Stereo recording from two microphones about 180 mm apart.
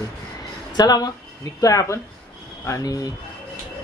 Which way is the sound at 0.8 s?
20° left (ahead or behind).